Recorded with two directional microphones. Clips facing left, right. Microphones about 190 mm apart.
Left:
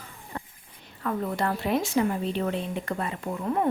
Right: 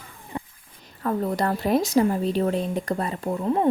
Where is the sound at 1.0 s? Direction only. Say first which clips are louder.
Right 4 dB; 35° right (ahead or behind).